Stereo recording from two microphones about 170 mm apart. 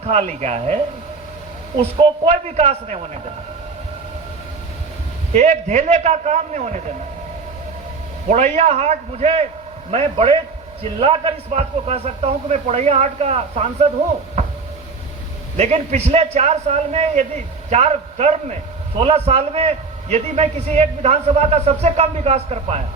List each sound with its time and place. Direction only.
0.0 s a man's voice: 40° right (ahead or behind)
5.3 s a man's voice: 45° right (ahead or behind)
8.3 s a man's voice: 45° right (ahead or behind)
15.5 s a man's voice: 45° right (ahead or behind)